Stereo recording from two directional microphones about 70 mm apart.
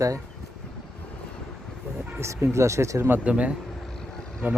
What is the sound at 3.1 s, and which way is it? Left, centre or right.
Speech, right.